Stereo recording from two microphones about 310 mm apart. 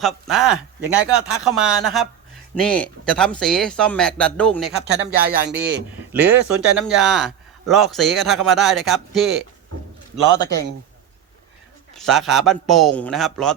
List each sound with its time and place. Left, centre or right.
0.0 s a man's voice: centre
4.9 s speech: right
6.1 s a man's voice: centre
11.9 s a man's voice: centre